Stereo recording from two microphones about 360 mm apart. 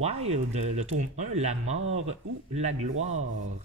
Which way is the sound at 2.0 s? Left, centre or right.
Centre.